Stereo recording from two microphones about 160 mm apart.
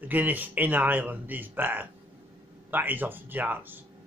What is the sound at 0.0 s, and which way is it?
Speech, 10° right (ahead or behind).